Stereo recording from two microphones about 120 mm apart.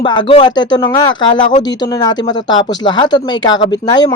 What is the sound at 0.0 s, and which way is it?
Speech, 40° left (ahead or behind).